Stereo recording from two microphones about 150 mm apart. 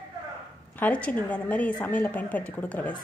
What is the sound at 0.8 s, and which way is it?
Speech, 10° left (ahead or behind).